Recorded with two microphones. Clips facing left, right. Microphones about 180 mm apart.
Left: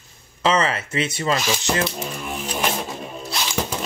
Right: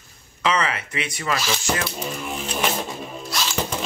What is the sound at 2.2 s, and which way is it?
Music, 5° right (ahead or behind).